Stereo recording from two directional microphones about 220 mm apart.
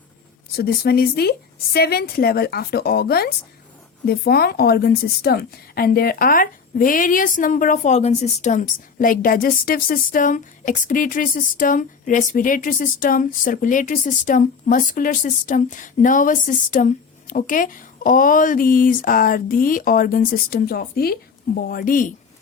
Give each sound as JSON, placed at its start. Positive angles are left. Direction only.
{"t": 0.5, "sound": "a woman's voice", "side_deg": 45}